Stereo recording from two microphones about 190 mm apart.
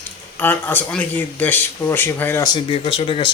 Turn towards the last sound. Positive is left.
turn(degrees=30)  # may be behind; listen again after turning